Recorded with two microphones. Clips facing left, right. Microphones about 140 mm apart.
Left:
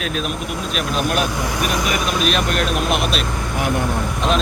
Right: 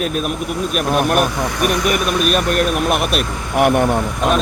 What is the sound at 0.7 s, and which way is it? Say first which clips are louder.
Speech: right 5 dB; 60° right (ahead or behind).